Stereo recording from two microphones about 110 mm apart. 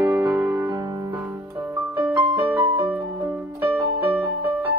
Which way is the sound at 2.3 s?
20° right (ahead or behind).